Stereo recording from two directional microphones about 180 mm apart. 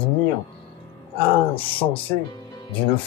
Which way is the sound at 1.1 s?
30° left (ahead or behind).